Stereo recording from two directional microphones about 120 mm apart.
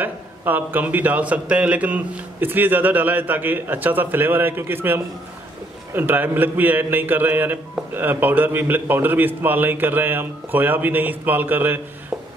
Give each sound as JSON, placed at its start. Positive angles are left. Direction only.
{"t": 0.0, "sound": "a man's voice", "side_deg": -15}